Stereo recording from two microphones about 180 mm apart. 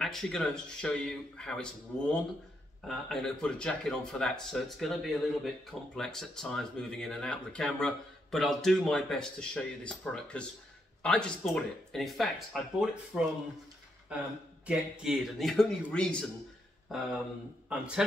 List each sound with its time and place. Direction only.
0.0 s speech: centre (ahead or behind)
14.7 s speech: centre (ahead or behind)